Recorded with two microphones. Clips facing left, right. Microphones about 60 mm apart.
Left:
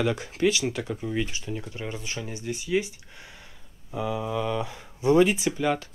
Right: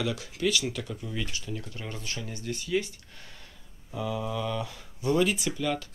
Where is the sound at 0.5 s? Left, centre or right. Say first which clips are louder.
Left 3 dB; left.